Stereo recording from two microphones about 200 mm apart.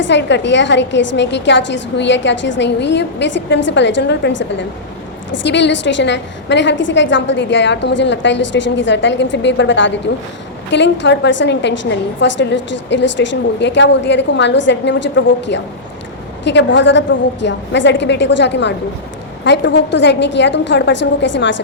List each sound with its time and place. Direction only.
0.0 s a woman's voice: 60° left (ahead or behind)
5.5 s a woman's voice: 60° left (ahead or behind)